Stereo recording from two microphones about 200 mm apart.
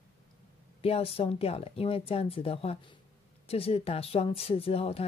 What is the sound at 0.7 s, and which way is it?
A woman's voice, 30° left (ahead or behind).